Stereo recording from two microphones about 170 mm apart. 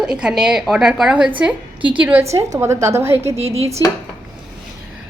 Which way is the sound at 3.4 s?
35° right (ahead or behind).